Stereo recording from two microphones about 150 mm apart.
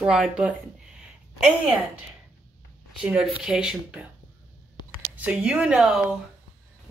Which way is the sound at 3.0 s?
5° right (ahead or behind).